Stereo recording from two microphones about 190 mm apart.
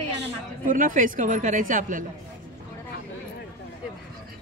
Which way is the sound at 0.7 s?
45° right (ahead or behind).